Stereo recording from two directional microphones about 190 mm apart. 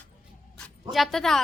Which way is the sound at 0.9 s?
Centre (ahead or behind).